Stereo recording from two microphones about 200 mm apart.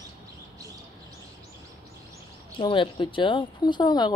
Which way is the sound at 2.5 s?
25° left (ahead or behind).